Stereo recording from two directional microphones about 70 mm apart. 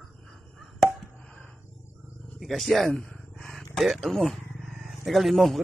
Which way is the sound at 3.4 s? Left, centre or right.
Centre.